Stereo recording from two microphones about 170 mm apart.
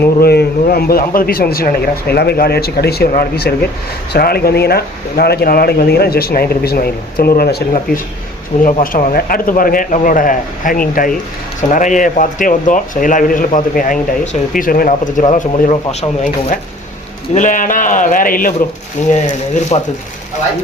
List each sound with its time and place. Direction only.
0.2 s speech: 65° left (ahead or behind); by 19.1 s 45° left (ahead or behind)
19.7 s speech: 35° left (ahead or behind)